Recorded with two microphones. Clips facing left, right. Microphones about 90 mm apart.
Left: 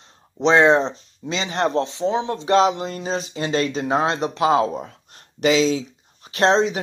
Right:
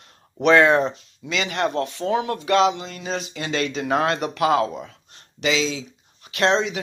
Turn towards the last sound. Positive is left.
turn(degrees=35)  # may be behind; listen again after turning